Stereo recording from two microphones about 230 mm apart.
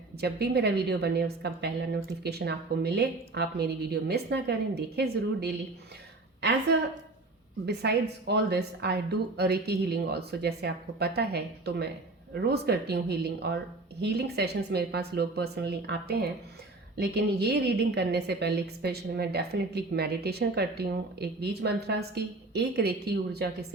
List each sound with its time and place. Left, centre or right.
0.2 s a woman's voice: right
7.6 s a woman's voice: right